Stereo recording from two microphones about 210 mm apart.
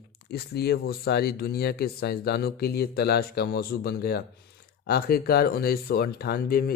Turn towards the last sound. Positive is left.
turn(degrees=45)  # may be behind; listen again after turning